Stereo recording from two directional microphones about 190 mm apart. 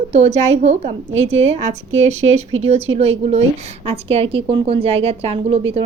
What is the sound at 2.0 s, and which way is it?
A woman's voice, 35° right (ahead or behind).